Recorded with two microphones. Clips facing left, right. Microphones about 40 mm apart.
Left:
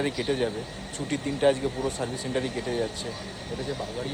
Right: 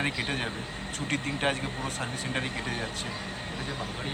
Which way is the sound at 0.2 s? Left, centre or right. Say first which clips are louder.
Left 5 dB; right.